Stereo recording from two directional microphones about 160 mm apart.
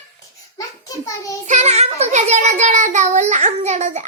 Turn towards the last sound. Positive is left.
turn(degrees=-45)  # may be behind; listen again after turning